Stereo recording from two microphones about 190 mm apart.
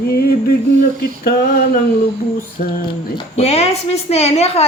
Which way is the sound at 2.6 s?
40° left (ahead or behind).